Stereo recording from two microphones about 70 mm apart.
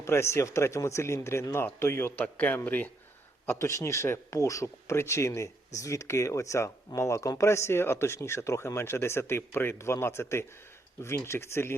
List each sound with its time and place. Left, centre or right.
0.0 s speech: left
2.2 s speech: centre
3.4 s speech: left